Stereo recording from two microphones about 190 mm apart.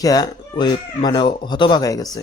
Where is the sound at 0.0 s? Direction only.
20° left (ahead or behind).